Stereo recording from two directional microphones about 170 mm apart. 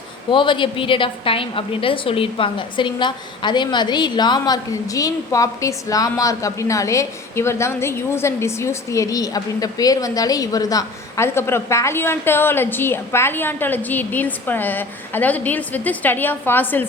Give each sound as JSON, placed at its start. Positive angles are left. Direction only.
{"t": 0.3, "sound": "a woman's voice", "side_deg": 30}